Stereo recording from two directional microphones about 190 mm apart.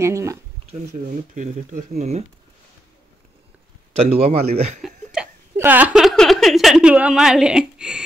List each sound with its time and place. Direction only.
0.0 s speech: 15° right (ahead or behind)
1.3 s speech: 40° right (ahead or behind)
3.9 s speech: 30° right (ahead or behind)
4.8 s speech: 5° right (ahead or behind)